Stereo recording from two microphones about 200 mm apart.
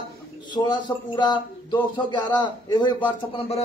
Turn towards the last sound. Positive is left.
turn(degrees=30)  # may be behind; listen again after turning